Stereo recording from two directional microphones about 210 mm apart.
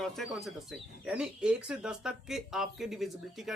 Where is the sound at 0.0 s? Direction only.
Centre (ahead or behind).